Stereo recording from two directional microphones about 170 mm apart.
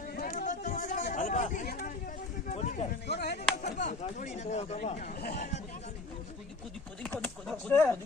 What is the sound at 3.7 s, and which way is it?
Speech, 45° left (ahead or behind).